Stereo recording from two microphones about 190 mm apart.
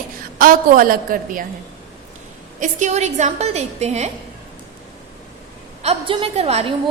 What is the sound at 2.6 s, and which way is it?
A woman's voice, 40° right (ahead or behind).